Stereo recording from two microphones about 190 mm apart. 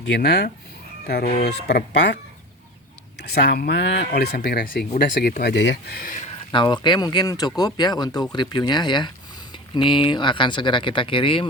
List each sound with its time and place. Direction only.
0.0 s speech: 60° left (ahead or behind)
3.3 s speech: 60° left (ahead or behind)
5.4 s speech: 60° left (ahead or behind); by 6.3 s 45° left (ahead or behind)
6.5 s speech: 25° left (ahead or behind)